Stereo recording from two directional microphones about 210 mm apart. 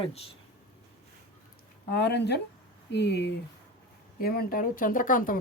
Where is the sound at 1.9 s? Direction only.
55° left (ahead or behind).